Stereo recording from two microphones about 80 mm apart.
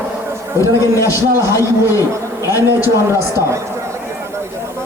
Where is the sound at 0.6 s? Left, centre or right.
Left.